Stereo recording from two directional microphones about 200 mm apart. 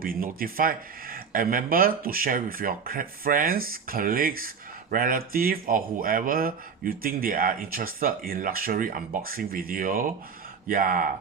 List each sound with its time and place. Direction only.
0.0 s speech: 45° right (ahead or behind)